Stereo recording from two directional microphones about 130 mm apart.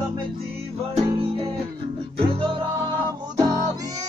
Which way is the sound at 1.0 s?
45° right (ahead or behind).